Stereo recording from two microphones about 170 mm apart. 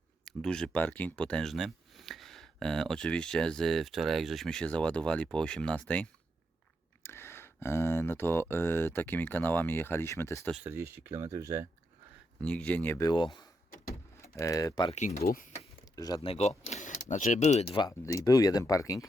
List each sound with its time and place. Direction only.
0.3 s speech: 5° left (ahead or behind)
10.5 s speech: 10° right (ahead or behind)
12.4 s speech: 5° left (ahead or behind)
14.8 s speech: 40° left (ahead or behind)
15.5 s speech: 20° left (ahead or behind)